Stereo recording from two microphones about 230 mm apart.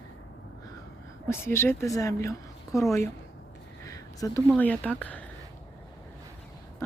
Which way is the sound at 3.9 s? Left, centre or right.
Centre.